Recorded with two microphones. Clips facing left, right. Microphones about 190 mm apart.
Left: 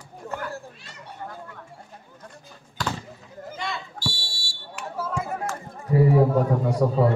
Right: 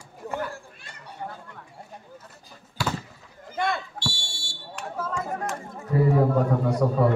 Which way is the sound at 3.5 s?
55° right (ahead or behind).